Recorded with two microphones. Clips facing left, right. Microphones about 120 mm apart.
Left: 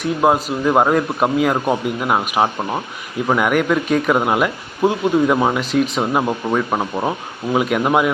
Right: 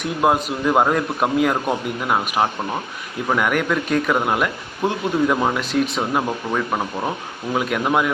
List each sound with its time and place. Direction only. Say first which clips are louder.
0.0 s speech: left 3 dB; centre (ahead or behind)
6.7 s speech: left 3 dB; 20° left (ahead or behind)
7.5 s speech: left 4 dB; 10° left (ahead or behind)